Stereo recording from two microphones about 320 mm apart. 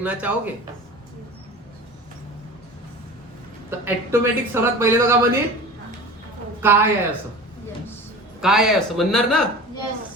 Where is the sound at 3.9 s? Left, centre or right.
Centre.